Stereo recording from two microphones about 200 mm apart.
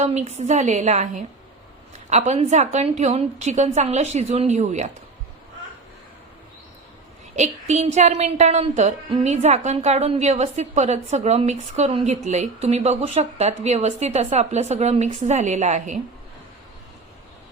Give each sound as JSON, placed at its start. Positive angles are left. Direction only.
{"t": 0.0, "sound": "a woman's voice", "side_deg": -35}
{"t": 7.3, "sound": "a woman's voice", "side_deg": -35}